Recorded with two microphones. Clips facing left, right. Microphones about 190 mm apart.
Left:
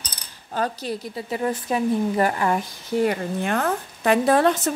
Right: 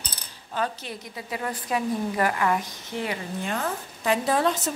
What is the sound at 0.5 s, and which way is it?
A woman's voice, 40° left (ahead or behind).